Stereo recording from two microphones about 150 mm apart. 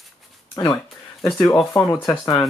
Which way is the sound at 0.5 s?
20° left (ahead or behind).